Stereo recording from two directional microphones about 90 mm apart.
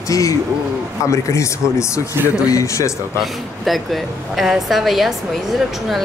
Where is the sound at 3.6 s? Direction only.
Centre (ahead or behind).